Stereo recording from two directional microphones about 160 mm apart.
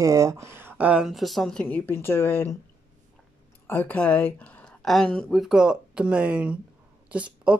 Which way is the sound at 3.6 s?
10° left (ahead or behind).